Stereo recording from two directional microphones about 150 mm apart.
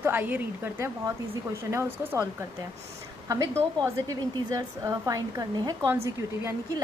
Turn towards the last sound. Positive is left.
turn(degrees=-20)  # may be behind; listen again after turning